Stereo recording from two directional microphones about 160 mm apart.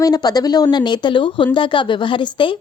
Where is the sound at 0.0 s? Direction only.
25° left (ahead or behind).